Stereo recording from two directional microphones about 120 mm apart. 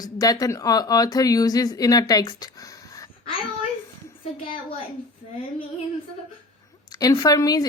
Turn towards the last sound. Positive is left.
turn(degrees=30)  # may be behind; listen again after turning